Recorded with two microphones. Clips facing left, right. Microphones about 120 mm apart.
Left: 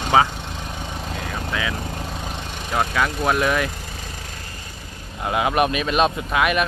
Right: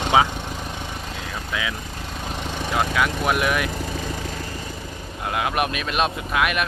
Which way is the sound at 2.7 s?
5° right (ahead or behind).